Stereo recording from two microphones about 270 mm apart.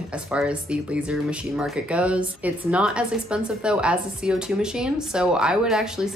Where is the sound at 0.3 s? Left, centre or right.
Centre.